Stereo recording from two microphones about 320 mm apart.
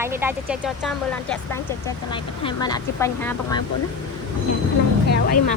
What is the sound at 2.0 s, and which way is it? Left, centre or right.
A woman's voice, centre.